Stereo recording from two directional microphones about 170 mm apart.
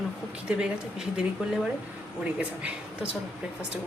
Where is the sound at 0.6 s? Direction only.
5° right (ahead or behind).